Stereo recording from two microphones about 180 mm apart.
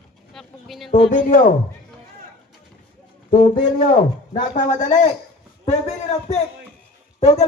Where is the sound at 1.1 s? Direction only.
45° left (ahead or behind).